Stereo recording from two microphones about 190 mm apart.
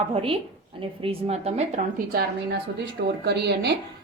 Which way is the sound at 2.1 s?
55° right (ahead or behind).